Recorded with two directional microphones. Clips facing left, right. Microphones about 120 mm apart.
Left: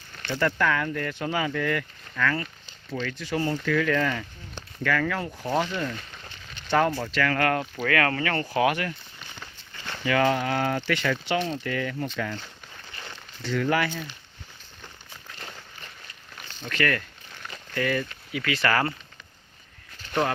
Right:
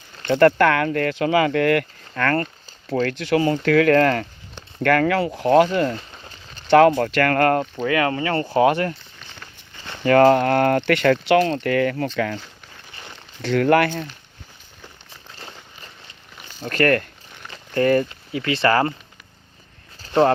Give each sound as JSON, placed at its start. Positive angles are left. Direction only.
{"t": 0.3, "sound": "speech", "side_deg": -65}
{"t": 3.1, "sound": "speech", "side_deg": -80}
{"t": 5.9, "sound": "speech", "side_deg": -25}
{"t": 6.2, "sound": "a sound", "side_deg": -35}
{"t": 6.7, "sound": "speech", "side_deg": -75}
{"t": 7.4, "sound": "speech", "side_deg": -40}
{"t": 7.8, "sound": "speech", "side_deg": -20}
{"t": 10.0, "sound": "speech", "side_deg": -45}
{"t": 11.4, "sound": "speech", "side_deg": -75}
{"t": 12.9, "sound": "a sound", "side_deg": -20}
{"t": 13.4, "sound": "speech", "side_deg": -65}
{"t": 16.6, "sound": "speech", "side_deg": -45}
{"t": 18.1, "sound": "speech", "side_deg": -30}
{"t": 20.0, "sound": "a sound", "side_deg": -35}